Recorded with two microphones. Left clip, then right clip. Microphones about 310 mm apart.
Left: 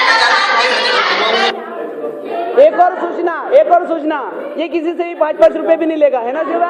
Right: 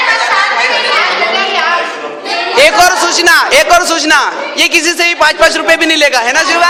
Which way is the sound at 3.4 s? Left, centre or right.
Right.